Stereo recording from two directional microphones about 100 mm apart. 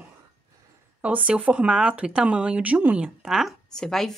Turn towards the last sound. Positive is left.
turn(degrees=5)  # may be behind; listen again after turning